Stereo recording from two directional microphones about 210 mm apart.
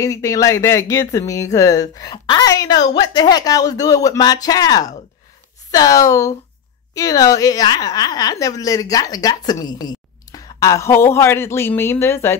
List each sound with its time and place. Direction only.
0.0 s speech: 15° left (ahead or behind)